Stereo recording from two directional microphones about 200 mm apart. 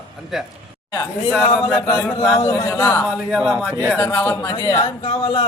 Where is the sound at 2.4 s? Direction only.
20° left (ahead or behind).